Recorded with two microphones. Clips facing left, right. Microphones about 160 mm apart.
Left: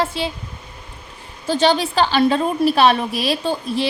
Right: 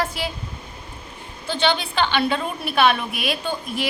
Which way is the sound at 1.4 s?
40° left (ahead or behind).